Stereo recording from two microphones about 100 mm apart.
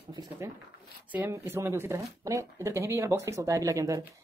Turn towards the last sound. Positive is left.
turn(degrees=-30)  # may be behind; listen again after turning